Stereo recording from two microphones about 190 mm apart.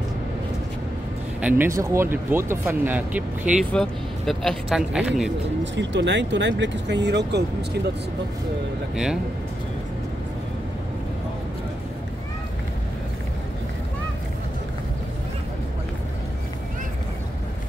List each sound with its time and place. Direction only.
1.4 s speech: 15° right (ahead or behind)
5.6 s speech: 65° right (ahead or behind)
8.9 s speech: 5° right (ahead or behind)